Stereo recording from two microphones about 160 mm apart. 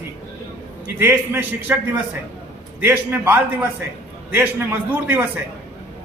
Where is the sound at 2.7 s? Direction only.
10° right (ahead or behind).